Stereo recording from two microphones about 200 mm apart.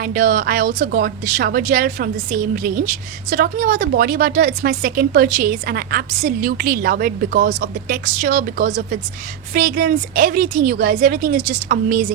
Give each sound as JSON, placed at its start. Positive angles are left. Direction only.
{"t": 0.0, "sound": "speech", "side_deg": -40}